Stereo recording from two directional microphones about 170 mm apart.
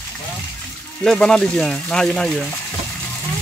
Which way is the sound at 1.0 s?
5° left (ahead or behind).